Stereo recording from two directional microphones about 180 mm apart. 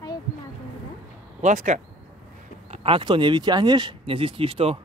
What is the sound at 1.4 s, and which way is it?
Speech, 40° right (ahead or behind).